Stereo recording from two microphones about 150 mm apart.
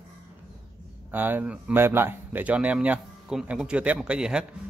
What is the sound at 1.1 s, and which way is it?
Speech, 10° right (ahead or behind).